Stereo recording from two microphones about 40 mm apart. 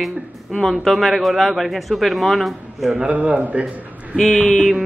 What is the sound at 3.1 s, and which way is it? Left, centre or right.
Speech, right.